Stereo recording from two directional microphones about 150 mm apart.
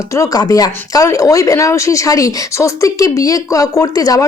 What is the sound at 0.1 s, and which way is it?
Speech, 20° left (ahead or behind).